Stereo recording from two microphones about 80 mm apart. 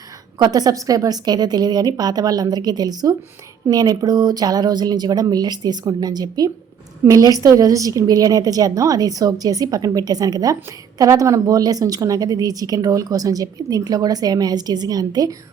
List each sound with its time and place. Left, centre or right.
0.3 s a woman's voice: right